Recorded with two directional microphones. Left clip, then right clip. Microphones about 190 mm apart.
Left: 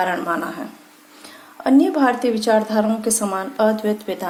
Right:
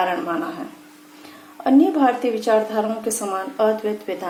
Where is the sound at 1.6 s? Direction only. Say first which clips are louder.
Even; 35° left (ahead or behind).